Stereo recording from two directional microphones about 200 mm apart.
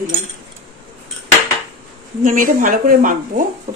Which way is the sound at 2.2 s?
45° right (ahead or behind).